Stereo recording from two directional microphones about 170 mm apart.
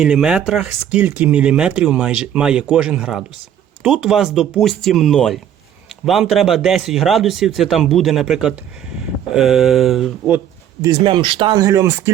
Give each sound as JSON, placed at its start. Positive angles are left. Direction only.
{"t": 0.0, "sound": "a man's voice", "side_deg": -5}
{"t": 10.8, "sound": "speech", "side_deg": -30}